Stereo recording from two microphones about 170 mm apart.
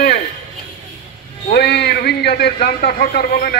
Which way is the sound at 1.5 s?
75° left (ahead or behind).